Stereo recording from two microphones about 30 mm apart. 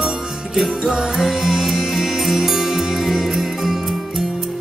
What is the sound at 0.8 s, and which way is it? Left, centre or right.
Music, centre.